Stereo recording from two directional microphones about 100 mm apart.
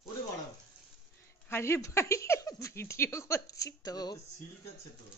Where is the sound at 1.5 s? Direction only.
25° left (ahead or behind); by 4.2 s 40° left (ahead or behind).